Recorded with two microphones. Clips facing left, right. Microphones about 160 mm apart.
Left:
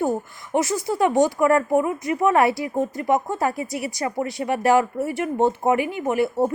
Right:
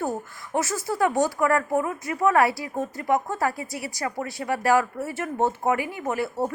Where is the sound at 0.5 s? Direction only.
20° left (ahead or behind).